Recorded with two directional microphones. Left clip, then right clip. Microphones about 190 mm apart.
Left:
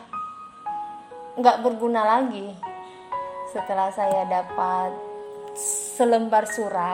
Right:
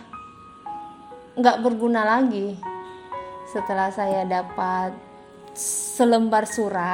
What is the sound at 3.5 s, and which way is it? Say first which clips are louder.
A woman's voice: right 1 dB; 25° right (ahead or behind).